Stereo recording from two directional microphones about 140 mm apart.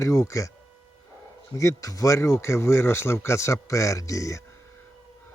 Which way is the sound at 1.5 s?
20° left (ahead or behind).